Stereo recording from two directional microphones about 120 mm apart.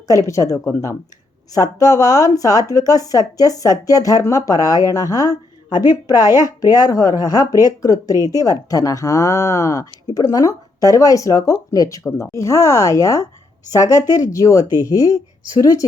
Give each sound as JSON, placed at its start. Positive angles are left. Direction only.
{"t": 0.1, "sound": "a woman's voice", "side_deg": 25}